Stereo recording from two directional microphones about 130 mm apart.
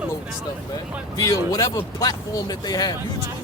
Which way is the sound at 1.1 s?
30° left (ahead or behind).